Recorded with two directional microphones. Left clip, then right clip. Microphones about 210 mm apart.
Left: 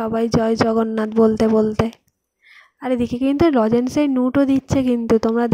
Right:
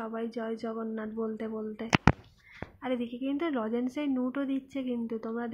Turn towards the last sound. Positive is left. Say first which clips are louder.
# left 18 dB
turn(degrees=55)  # may be behind; listen again after turning